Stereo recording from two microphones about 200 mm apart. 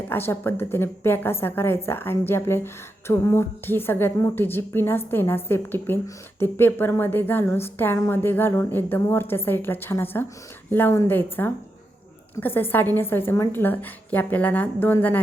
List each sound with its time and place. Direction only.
0.1 s a woman's voice: 10° left (ahead or behind)